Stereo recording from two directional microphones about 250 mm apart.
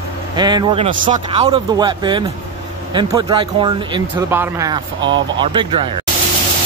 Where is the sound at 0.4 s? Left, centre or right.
Centre.